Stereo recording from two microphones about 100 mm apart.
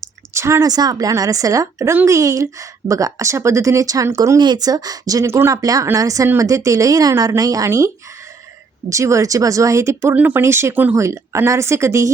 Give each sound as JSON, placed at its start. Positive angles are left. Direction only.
{"t": 0.0, "sound": "speech", "side_deg": -30}
{"t": 4.4, "sound": "speech", "side_deg": -45}
{"t": 8.9, "sound": "speech", "side_deg": -30}